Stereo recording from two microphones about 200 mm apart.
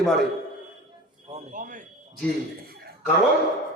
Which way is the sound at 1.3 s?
40° right (ahead or behind).